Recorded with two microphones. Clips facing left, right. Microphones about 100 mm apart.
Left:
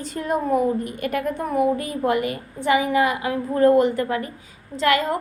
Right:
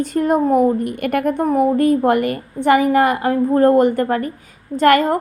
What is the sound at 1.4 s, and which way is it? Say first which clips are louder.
A woman's voice: right 7 dB; 45° right (ahead or behind).